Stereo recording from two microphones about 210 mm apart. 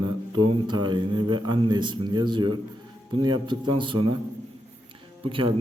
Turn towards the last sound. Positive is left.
turn(degrees=-25)  # may be behind; listen again after turning